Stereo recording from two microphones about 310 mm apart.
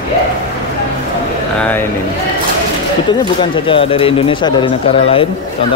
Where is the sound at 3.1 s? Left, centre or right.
Centre.